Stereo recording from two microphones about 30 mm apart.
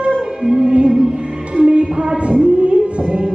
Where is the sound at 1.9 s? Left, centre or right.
Right.